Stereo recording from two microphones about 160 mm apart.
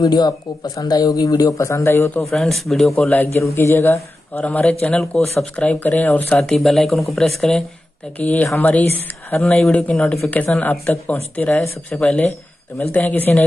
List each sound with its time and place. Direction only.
0.0 s speech: 25° left (ahead or behind)
2.3 s speech: centre (ahead or behind)
3.3 s speech: 15° left (ahead or behind)